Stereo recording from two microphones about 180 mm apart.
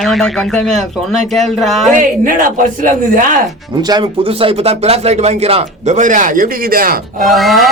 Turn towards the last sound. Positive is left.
turn(degrees=0)  # may be behind; listen again after turning